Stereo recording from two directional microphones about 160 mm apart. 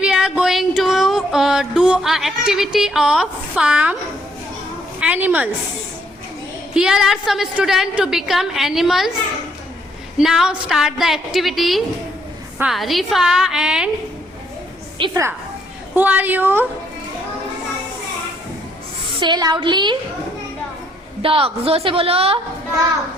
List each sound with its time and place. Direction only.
0.0 s a sound: 5° right (ahead or behind)
4.9 s a woman's voice: 10° right (ahead or behind)
6.7 s a woman's voice: 5° right (ahead or behind)
10.2 s a woman's voice: centre (ahead or behind)
15.1 s a woman's voice: 15° right (ahead or behind)
19.2 s a woman's voice: 25° right (ahead or behind)
21.2 s a woman's voice: 35° right (ahead or behind)